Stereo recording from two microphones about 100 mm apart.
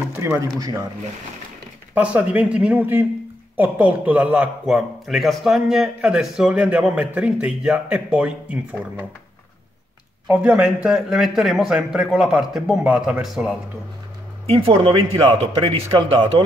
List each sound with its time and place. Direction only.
0.1 s speech: 25° right (ahead or behind)
2.0 s speech: 15° right (ahead or behind)
4.6 s speech: centre (ahead or behind)
10.2 s speech: 10° right (ahead or behind)
15.3 s a man's voice: 65° right (ahead or behind)